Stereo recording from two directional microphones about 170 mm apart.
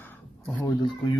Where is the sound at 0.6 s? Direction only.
25° left (ahead or behind).